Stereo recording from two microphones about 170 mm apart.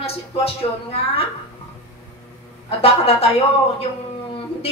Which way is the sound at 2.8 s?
35° left (ahead or behind).